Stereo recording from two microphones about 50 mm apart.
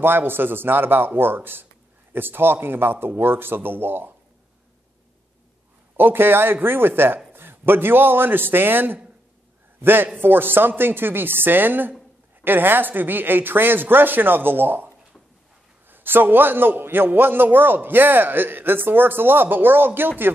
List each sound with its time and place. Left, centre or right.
0.0 s a man's voice: right
5.9 s a man's voice: right
15.9 s a man's voice: right